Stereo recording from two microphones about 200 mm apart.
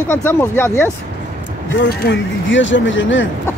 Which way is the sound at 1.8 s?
60° left (ahead or behind).